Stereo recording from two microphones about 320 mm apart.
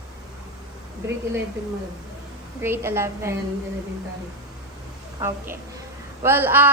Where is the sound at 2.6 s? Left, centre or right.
Centre.